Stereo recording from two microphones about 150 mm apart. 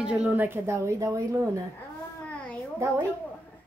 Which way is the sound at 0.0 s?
10° right (ahead or behind).